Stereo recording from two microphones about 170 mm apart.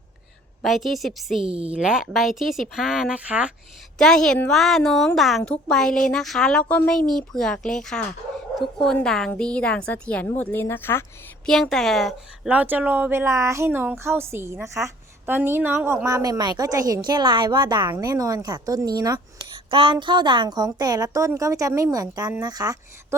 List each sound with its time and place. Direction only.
0.6 s speech: centre (ahead or behind)
1.4 s a woman's voice: 35° right (ahead or behind)
1.7 s speech: 5° right (ahead or behind)
3.9 s speech: 5° left (ahead or behind)
11.4 s a woman's voice: 5° left (ahead or behind); by 22.8 s 25° right (ahead or behind)